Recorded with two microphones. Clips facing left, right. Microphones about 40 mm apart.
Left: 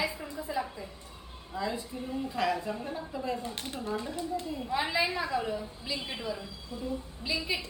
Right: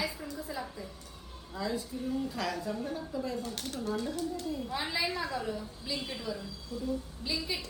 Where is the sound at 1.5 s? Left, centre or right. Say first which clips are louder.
Left 1 dB; left.